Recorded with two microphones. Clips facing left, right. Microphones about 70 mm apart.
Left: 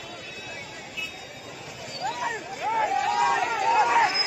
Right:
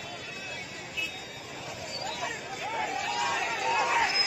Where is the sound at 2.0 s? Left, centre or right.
Left.